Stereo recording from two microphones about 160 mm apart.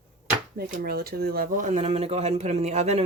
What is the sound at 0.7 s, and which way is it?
A woman's voice, 70° right (ahead or behind).